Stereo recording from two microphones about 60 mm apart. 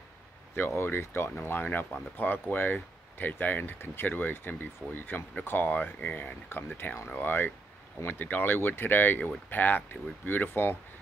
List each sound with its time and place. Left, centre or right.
0.6 s speech: left